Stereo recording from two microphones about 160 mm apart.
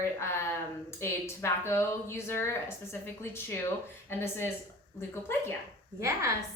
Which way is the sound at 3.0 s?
15° left (ahead or behind).